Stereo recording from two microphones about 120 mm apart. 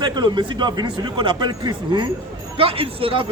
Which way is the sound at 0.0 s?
35° right (ahead or behind).